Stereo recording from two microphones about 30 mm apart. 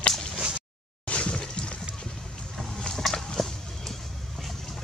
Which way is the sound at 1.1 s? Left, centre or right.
Left.